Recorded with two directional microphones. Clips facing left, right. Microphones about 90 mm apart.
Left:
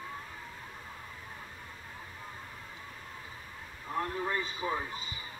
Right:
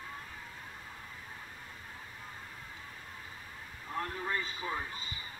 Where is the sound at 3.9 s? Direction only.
20° left (ahead or behind).